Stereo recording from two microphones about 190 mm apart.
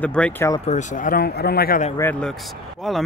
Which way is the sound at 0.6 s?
40° left (ahead or behind).